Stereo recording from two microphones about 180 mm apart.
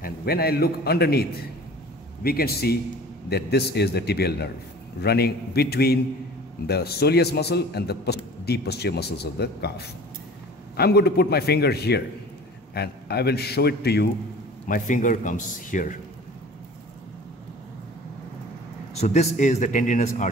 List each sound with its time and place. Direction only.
0.0 s a man's voice: 60° left (ahead or behind)
2.2 s a man's voice: 60° left (ahead or behind)
14.7 s a man's voice: 45° left (ahead or behind)
18.9 s a man's voice: 40° left (ahead or behind)